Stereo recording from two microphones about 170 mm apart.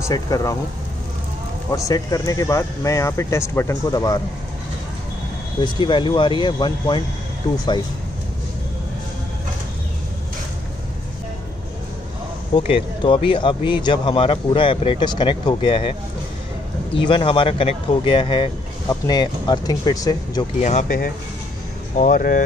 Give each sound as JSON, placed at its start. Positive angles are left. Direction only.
{"t": 0.0, "sound": "speech", "side_deg": 20}
{"t": 1.7, "sound": "speech", "side_deg": 20}
{"t": 5.6, "sound": "speech", "side_deg": 25}
{"t": 12.5, "sound": "speech", "side_deg": 30}
{"t": 20.6, "sound": "speech", "side_deg": 50}